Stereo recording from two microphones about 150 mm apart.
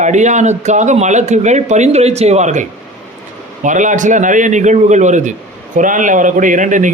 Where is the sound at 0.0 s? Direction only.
55° right (ahead or behind).